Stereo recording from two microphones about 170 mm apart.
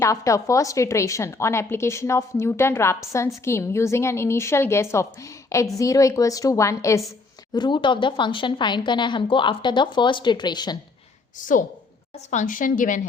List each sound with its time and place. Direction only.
0.0 s a woman's voice: 20° left (ahead or behind)
11.3 s a woman's voice: 50° left (ahead or behind)